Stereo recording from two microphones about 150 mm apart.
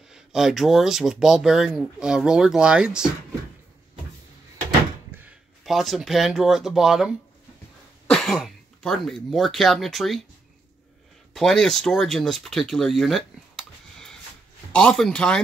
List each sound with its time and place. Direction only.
0.1 s speech: 5° right (ahead or behind)
5.6 s speech: centre (ahead or behind)
11.3 s speech: centre (ahead or behind)